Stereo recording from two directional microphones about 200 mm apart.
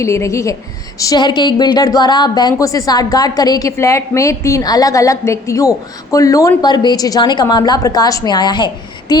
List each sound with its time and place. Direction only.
0.0 s a woman's voice: 15° left (ahead or behind)